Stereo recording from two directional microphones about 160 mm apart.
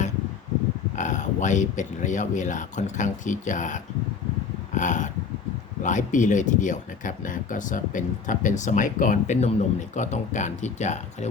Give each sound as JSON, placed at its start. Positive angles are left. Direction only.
{"t": 0.9, "sound": "speech", "side_deg": 50}